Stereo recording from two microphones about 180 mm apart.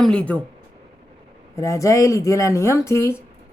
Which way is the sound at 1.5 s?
15° left (ahead or behind).